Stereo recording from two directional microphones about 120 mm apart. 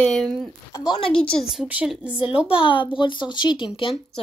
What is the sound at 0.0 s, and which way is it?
Speech, 5° left (ahead or behind).